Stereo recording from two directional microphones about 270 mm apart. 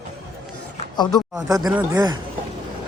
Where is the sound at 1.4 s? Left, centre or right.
Centre.